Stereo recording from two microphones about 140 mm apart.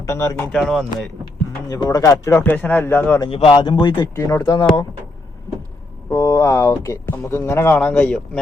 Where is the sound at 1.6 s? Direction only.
30° left (ahead or behind).